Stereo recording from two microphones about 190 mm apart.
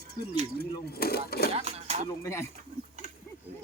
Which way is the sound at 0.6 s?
55° left (ahead or behind).